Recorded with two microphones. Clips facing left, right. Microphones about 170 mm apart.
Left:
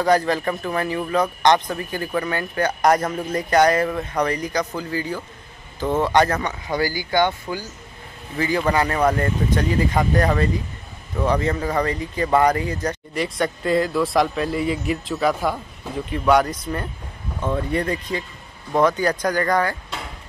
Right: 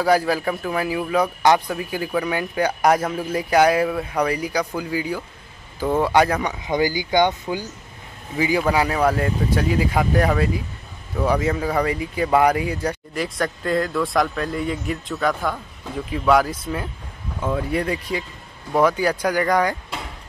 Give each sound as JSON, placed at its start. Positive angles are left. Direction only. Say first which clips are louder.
{"t": 0.0, "sound": "speech", "louder": "even", "side_deg": -5}